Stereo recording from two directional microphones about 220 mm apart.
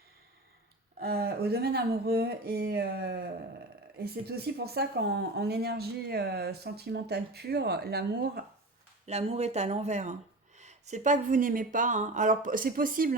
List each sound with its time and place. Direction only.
0.9 s speech: 45° right (ahead or behind)
9.0 s speech: 30° right (ahead or behind)